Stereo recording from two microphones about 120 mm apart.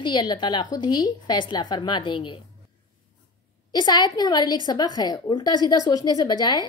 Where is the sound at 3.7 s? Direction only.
35° left (ahead or behind).